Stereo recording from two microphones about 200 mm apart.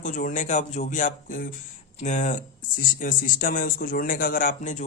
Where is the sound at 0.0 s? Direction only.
40° left (ahead or behind).